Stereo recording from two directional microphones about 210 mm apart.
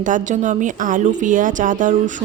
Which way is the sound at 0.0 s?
35° right (ahead or behind).